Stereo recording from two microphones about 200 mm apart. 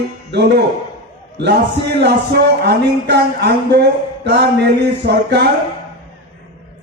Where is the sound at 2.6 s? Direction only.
55° right (ahead or behind).